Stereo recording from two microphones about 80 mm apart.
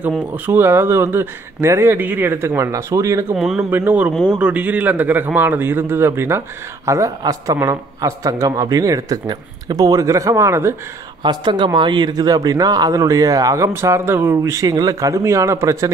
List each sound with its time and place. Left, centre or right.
0.3 s a man's voice: right
3.3 s speech: centre
3.7 s a man's voice: right
4.1 s a man's voice: centre
4.4 s a man's voice: centre
6.9 s speech: right
11.2 s speech: right
13.7 s speech: right